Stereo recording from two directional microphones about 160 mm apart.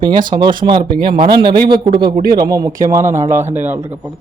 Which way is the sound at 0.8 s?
65° right (ahead or behind).